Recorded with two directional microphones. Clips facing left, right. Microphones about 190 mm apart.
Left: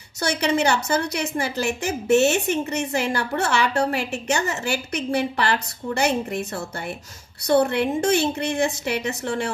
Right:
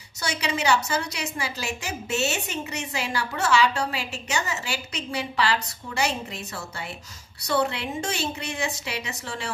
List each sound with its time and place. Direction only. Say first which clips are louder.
0.2 s a woman's voice: left 7 dB; 55° left (ahead or behind)